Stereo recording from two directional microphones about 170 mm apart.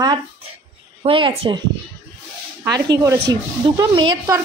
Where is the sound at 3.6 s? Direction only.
25° right (ahead or behind).